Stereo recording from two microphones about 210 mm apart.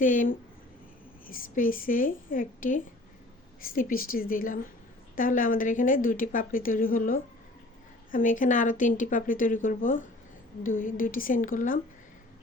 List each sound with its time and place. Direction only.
0.0 s speech: 40° left (ahead or behind)